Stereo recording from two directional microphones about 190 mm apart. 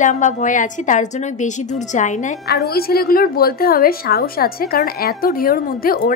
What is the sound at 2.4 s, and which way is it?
A woman's voice, 55° left (ahead or behind).